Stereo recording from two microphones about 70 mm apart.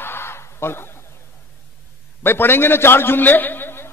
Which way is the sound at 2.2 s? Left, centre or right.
Left.